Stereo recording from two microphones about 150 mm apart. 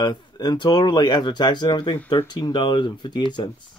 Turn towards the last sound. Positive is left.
turn(degrees=30)  # may be behind; listen again after turning